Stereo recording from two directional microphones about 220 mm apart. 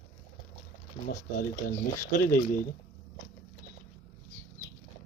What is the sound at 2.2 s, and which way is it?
Speech, 40° left (ahead or behind).